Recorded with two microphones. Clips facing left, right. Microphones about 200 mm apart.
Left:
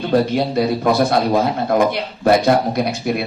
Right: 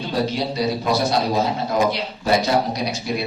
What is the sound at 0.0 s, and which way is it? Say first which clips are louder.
A man's voice: left 6 dB; 55° left (ahead or behind).